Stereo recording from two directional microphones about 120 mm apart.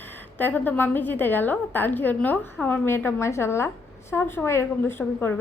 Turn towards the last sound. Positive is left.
turn(degrees=15)  # may be behind; listen again after turning